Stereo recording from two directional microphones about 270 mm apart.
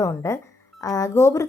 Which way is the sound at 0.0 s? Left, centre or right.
Centre.